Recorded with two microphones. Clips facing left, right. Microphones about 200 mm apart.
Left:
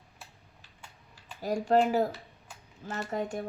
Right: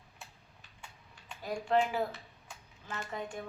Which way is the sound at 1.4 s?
40° left (ahead or behind).